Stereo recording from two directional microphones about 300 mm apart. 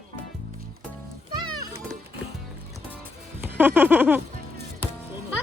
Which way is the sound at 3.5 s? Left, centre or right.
Centre.